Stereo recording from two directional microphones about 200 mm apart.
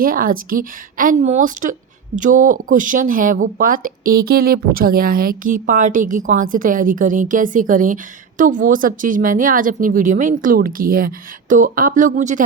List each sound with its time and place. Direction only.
0.0 s speech: 45° right (ahead or behind)